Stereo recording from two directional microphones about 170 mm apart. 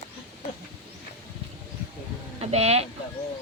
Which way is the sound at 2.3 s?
40° right (ahead or behind).